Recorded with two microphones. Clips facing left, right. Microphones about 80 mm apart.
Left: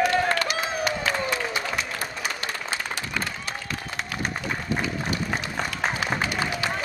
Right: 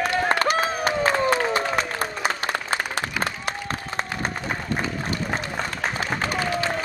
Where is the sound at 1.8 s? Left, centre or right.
Right.